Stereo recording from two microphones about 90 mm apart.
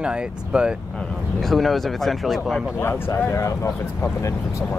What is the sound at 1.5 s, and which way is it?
Speech, centre (ahead or behind).